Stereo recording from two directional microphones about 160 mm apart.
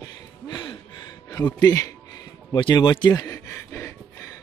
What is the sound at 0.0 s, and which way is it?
Music, 30° left (ahead or behind).